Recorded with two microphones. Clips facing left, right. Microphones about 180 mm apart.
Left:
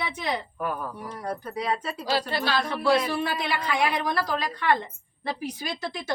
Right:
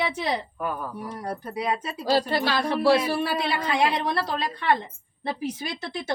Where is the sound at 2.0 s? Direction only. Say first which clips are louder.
Right 5 dB; 45° right (ahead or behind).